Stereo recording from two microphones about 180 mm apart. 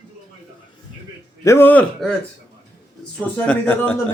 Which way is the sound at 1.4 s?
15° left (ahead or behind).